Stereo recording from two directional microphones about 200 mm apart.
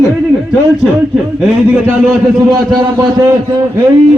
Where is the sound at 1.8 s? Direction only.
15° right (ahead or behind).